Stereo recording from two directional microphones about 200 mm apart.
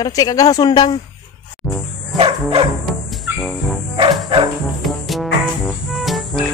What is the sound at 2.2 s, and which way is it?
Bow-wow, 30° right (ahead or behind).